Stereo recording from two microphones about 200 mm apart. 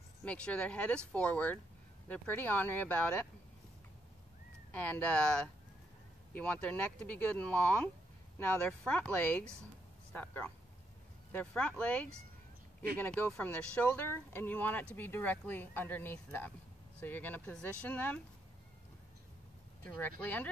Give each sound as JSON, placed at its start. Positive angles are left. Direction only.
{"t": 0.2, "sound": "speech", "side_deg": 5}
{"t": 4.7, "sound": "speech", "side_deg": 5}
{"t": 19.8, "sound": "speech", "side_deg": 5}